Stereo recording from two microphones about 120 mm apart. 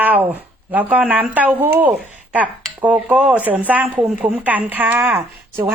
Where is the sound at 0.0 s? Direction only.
15° right (ahead or behind).